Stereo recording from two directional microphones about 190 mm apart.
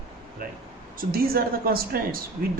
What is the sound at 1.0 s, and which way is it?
A man's voice, 50° right (ahead or behind).